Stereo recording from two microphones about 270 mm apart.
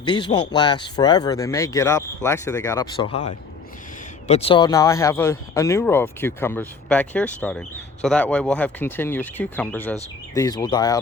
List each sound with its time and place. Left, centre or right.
0.1 s speech: centre
3.1 s speech: left
4.3 s speech: left